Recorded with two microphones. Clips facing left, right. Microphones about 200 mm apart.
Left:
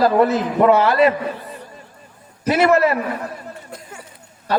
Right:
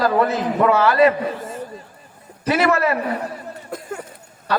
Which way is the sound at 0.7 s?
30° left (ahead or behind).